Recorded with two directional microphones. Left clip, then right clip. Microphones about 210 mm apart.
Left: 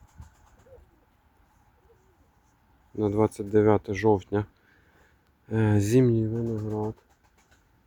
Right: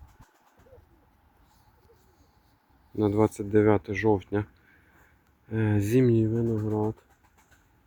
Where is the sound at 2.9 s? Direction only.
Centre (ahead or behind); by 4.4 s 15° left (ahead or behind).